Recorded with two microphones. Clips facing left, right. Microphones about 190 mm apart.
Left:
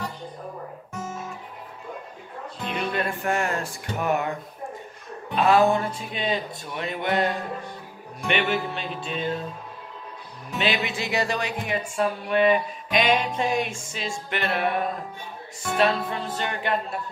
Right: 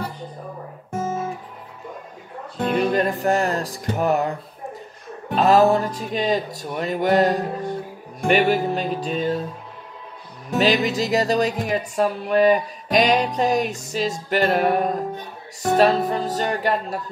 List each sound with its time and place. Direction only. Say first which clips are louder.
2.6 s music: right 8 dB; 40° right (ahead or behind)
10.5 s music: right 7 dB; 40° right (ahead or behind)